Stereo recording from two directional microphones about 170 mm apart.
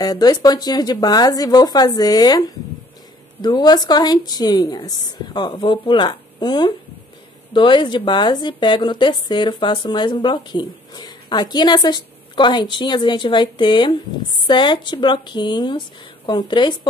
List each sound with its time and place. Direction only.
0.0 s speech: 20° left (ahead or behind)